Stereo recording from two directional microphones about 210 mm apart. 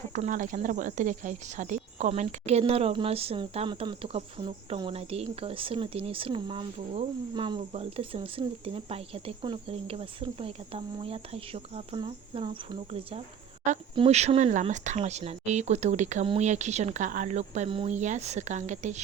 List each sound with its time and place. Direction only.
0.1 s speech: 35° right (ahead or behind)